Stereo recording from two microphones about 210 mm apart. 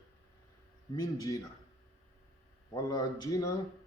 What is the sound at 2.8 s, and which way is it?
Speech, 15° left (ahead or behind).